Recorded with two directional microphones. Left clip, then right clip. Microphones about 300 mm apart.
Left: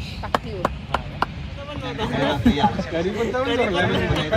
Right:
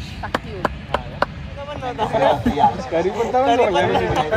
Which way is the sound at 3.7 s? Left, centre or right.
Right.